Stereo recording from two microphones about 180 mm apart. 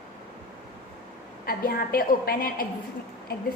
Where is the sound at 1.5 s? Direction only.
55° left (ahead or behind).